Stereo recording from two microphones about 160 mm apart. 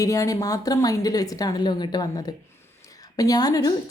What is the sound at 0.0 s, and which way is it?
A woman's voice, 20° left (ahead or behind).